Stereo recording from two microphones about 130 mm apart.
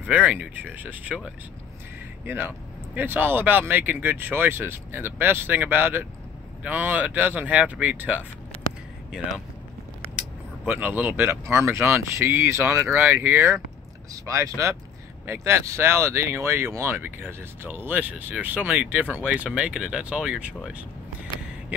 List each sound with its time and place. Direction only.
0.0 s speech: 10° right (ahead or behind)
10.7 s speech: 15° right (ahead or behind)